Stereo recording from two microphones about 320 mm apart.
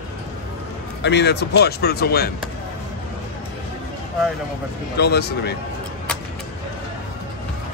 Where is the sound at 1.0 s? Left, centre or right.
Left.